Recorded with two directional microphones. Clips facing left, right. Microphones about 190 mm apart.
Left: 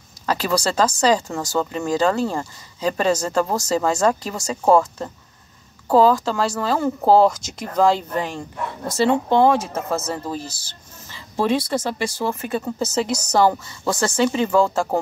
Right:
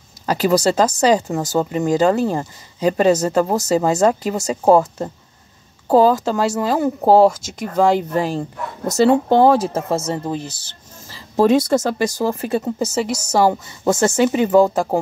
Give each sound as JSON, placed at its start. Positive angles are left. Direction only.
{"t": 0.3, "sound": "speech", "side_deg": -20}
{"t": 8.1, "sound": "speech", "side_deg": -35}
{"t": 9.8, "sound": "speech", "side_deg": -25}
{"t": 11.1, "sound": "speech", "side_deg": -40}
{"t": 12.7, "sound": "speech", "side_deg": -10}
{"t": 13.7, "sound": "speech", "side_deg": -25}